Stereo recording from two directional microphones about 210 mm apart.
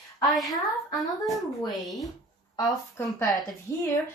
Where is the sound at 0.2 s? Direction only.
Centre (ahead or behind).